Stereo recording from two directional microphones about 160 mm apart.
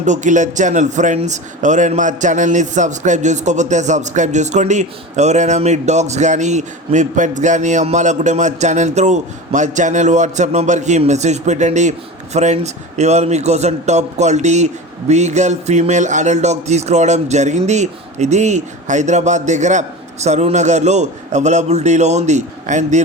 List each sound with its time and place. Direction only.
0.0 s a man's voice: 50° right (ahead or behind)